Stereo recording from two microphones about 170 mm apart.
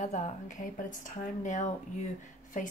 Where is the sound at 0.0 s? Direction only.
45° left (ahead or behind).